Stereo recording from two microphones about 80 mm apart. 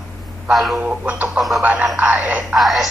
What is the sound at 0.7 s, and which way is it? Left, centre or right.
Speech, centre.